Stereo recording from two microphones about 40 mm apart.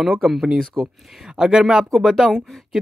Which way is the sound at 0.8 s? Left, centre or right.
Right.